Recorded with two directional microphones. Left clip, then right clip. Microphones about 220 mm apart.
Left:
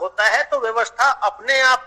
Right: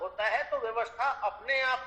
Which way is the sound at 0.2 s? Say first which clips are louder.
Left 13 dB; 45° left (ahead or behind).